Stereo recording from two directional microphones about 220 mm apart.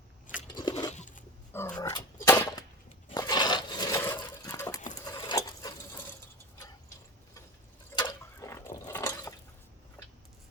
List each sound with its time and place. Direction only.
0.5 s biting: 20° left (ahead or behind)
0.9 s dog: 35° left (ahead or behind)
1.5 s dog: 10° left (ahead or behind)
2.2 s a sound: 10° left (ahead or behind)
4.9 s sewing machine: 20° left (ahead or behind)
7.9 s a sound: 15° left (ahead or behind)